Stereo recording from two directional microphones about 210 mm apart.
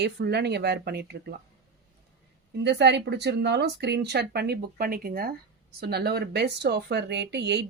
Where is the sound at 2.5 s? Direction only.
55° right (ahead or behind).